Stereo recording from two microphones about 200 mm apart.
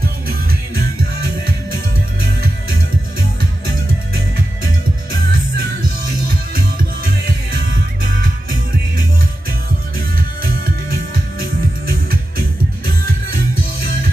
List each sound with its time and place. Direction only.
0.0 s music: 50° right (ahead or behind)
5.1 s music: 45° right (ahead or behind)